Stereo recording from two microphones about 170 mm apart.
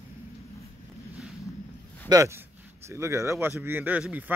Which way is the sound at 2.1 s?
15° right (ahead or behind).